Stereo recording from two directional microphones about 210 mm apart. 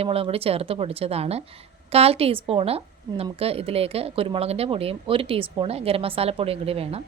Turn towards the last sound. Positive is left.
turn(degrees=-30)  # may be behind; listen again after turning